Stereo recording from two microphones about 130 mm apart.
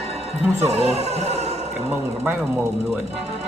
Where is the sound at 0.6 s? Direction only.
50° right (ahead or behind).